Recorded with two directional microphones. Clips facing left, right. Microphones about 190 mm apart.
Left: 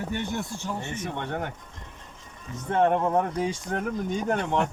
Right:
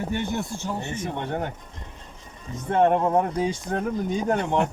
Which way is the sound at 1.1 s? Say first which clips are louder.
Right 3 dB; 20° right (ahead or behind).